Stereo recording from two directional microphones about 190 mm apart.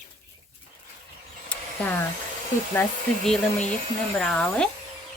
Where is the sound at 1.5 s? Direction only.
10° left (ahead or behind).